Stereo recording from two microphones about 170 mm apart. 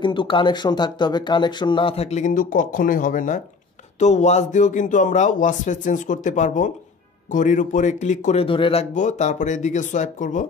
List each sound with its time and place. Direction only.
0.0 s a man's voice: 30° left (ahead or behind)
8.9 s a man's voice: 45° left (ahead or behind)